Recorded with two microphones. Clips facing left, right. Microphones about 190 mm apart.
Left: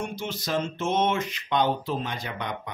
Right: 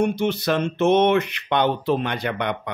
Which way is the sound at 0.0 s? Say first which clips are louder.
Right 11 dB; 65° right (ahead or behind).